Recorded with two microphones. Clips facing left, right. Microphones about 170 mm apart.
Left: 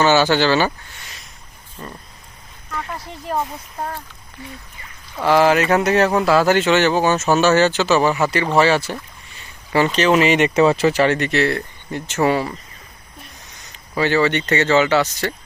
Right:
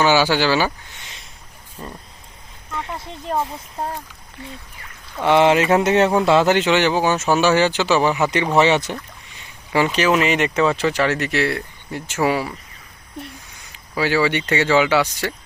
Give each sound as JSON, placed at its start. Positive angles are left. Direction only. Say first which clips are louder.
{"t": 0.0, "sound": "speech", "louder": "left 1 dB", "side_deg": -10}
{"t": 2.7, "sound": "a sound", "louder": "even", "side_deg": -25}
{"t": 3.8, "sound": "mantra", "louder": "right 1 dB", "side_deg": -25}
{"t": 5.2, "sound": "mantra", "louder": "even", "side_deg": -25}
{"t": 6.2, "sound": "speech", "louder": "even", "side_deg": -20}
{"t": 8.5, "sound": "mantra", "louder": "even", "side_deg": -20}
{"t": 9.7, "sound": "speech", "louder": "left 2 dB", "side_deg": -10}
{"t": 10.2, "sound": "speech", "louder": "left 3 dB", "side_deg": 0}
{"t": 10.5, "sound": "speech", "louder": "left 4 dB", "side_deg": 30}
{"t": 10.8, "sound": "speech", "louder": "left 3 dB", "side_deg": 5}
{"t": 13.7, "sound": "speech", "louder": "left 2 dB", "side_deg": -10}